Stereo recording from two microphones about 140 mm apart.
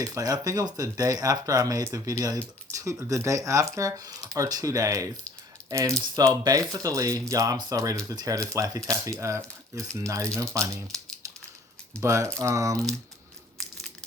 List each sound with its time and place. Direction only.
0.0 s speech: 25° right (ahead or behind)
11.9 s speech: 20° right (ahead or behind)